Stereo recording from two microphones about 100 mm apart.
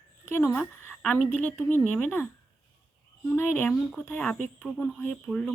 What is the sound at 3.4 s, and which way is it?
Speech, 20° left (ahead or behind).